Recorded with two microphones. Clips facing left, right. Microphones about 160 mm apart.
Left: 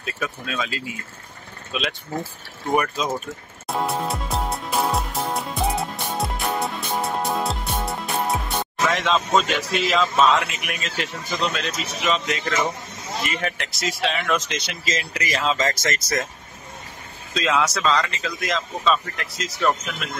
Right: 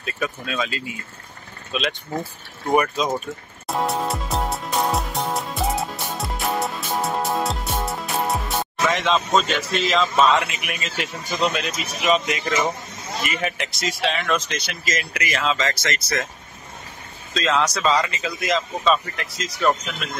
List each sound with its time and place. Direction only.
0.0 s speech: centre (ahead or behind)
3.6 s music: centre (ahead or behind)
11.2 s speech: 15° right (ahead or behind)
14.3 s speech: 20° left (ahead or behind); by 16.2 s 45° left (ahead or behind)
17.3 s speech: 10° left (ahead or behind)